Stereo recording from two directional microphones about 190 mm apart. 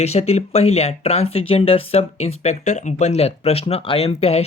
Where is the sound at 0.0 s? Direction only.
35° left (ahead or behind).